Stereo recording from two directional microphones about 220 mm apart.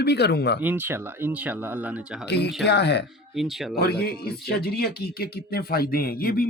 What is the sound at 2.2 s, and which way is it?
Speech, 50° left (ahead or behind).